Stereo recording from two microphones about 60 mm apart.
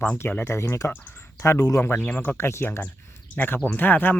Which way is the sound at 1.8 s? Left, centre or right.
Left.